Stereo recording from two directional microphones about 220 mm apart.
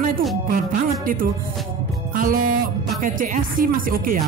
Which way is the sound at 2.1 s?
40° right (ahead or behind).